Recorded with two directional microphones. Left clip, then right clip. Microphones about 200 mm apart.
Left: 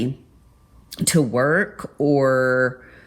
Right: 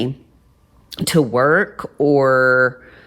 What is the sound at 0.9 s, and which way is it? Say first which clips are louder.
Speech: right 4 dB; 20° right (ahead or behind).